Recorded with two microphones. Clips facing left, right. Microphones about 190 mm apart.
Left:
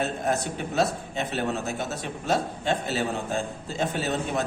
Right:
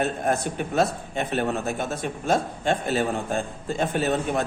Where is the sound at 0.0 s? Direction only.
55° right (ahead or behind).